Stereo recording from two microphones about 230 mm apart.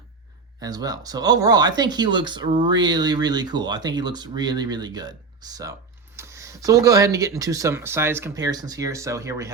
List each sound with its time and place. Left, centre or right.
0.6 s speech: centre